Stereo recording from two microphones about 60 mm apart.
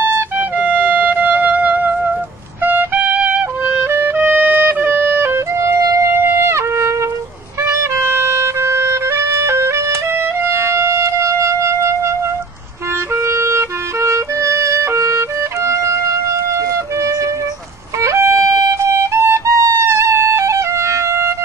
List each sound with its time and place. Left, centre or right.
0.4 s music: right
3.8 s music: right
5.6 s music: right
6.0 s music: right